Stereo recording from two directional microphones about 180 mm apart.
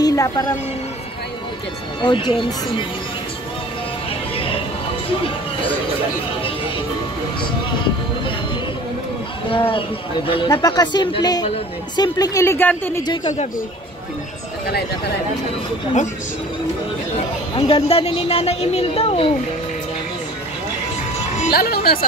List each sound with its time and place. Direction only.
0.0 s music: 20° left (ahead or behind)
2.0 s speech: 25° left (ahead or behind)
4.4 s music: 30° left (ahead or behind)
9.5 s a woman's voice: 30° left (ahead or behind); by 13.0 s 10° left (ahead or behind)
17.6 s a woman's voice: 35° left (ahead or behind)
21.5 s speech: 60° left (ahead or behind)